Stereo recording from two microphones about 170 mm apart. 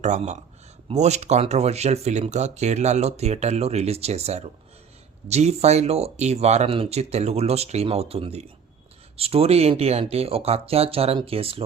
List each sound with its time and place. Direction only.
0.0 s speech: 45° right (ahead or behind)